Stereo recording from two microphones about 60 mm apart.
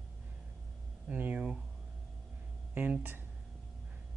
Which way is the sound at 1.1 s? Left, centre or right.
Right.